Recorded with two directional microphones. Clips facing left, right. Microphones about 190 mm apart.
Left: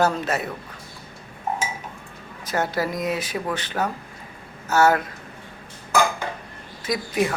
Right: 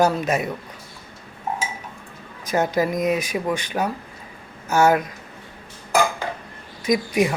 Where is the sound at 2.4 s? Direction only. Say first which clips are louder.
Right 4 dB; 15° right (ahead or behind).